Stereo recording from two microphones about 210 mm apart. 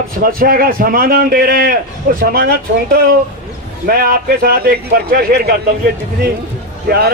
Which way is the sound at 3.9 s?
45° right (ahead or behind).